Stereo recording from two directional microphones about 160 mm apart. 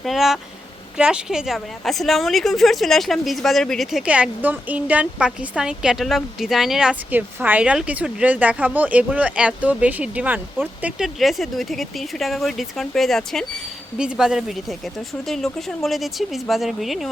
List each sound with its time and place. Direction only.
0.0 s a woman's voice: centre (ahead or behind)